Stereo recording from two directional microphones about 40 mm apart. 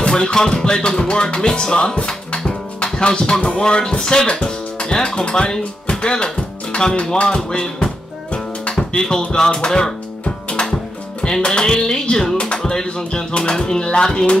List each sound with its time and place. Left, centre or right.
0.0 s music: centre
3.9 s speech: centre
5.6 s music: left